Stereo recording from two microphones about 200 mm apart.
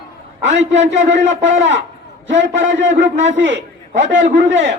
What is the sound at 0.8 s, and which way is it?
Speech, 65° right (ahead or behind).